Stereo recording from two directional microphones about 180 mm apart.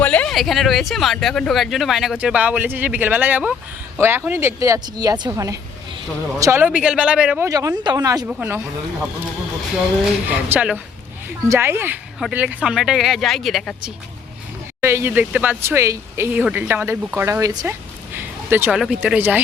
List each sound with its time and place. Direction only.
0.0 s speech: 10° left (ahead or behind)
7.4 s speech: 20° right (ahead or behind)
10.2 s speech: 10° right (ahead or behind)
14.8 s speech: 15° right (ahead or behind)